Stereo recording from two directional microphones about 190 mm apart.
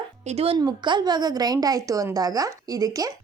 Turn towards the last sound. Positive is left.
turn(degrees=-20)  # may be behind; listen again after turning